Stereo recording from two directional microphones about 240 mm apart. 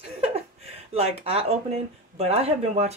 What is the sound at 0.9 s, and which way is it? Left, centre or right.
Speech, right.